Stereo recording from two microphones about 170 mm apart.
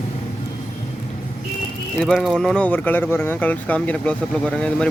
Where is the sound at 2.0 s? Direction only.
5° left (ahead or behind).